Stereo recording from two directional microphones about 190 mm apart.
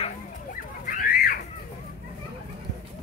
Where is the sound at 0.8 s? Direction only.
45° left (ahead or behind).